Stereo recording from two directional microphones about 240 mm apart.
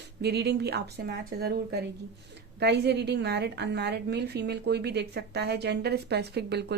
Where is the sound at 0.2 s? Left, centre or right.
Right.